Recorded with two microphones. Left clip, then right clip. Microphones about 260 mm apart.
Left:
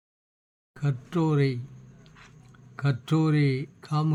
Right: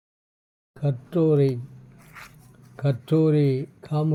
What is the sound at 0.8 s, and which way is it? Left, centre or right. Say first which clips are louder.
Speech: right 5 dB; centre.